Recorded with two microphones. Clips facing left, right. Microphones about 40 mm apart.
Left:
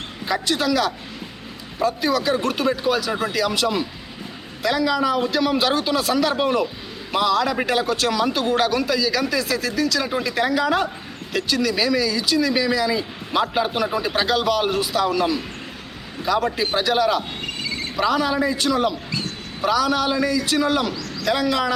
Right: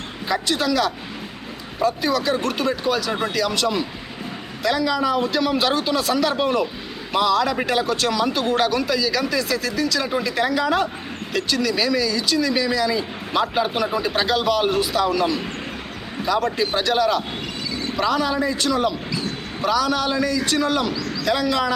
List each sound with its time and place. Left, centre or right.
0.3 s speech: centre
17.4 s a sound: left
17.9 s speech: centre